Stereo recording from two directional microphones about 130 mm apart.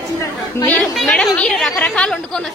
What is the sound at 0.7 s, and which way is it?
A woman's voice, 5° left (ahead or behind).